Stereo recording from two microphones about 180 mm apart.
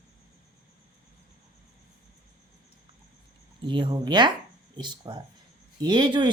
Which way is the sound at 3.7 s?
25° right (ahead or behind).